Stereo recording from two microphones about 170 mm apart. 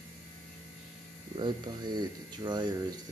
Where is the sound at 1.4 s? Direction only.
25° right (ahead or behind).